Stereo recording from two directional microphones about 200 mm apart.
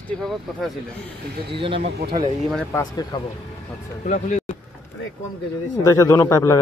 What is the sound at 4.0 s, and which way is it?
Speech, 35° left (ahead or behind).